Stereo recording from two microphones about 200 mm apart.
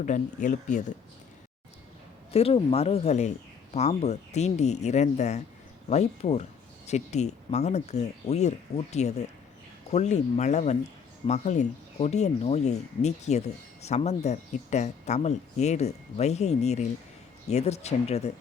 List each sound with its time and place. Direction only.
0.0 s speech: 40° left (ahead or behind)
2.3 s speech: 30° left (ahead or behind)